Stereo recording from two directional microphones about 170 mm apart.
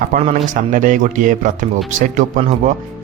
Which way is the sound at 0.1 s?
50° right (ahead or behind).